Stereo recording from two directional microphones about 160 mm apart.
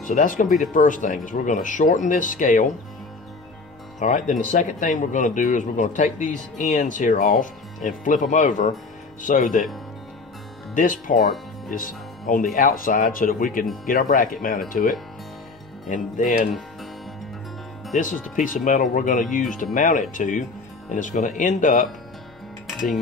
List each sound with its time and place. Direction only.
0.0 s speech: 55° left (ahead or behind)
4.0 s speech: 50° left (ahead or behind)
10.7 s speech: 55° left (ahead or behind)
17.9 s speech: 55° left (ahead or behind)